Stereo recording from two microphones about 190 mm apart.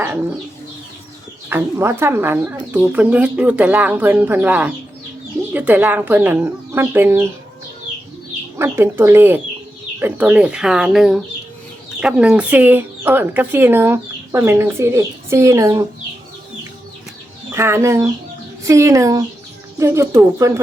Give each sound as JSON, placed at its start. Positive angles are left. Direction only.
{"t": 1.5, "sound": "speech", "side_deg": -10}
{"t": 8.5, "sound": "speech", "side_deg": -15}
{"t": 17.5, "sound": "speech", "side_deg": -15}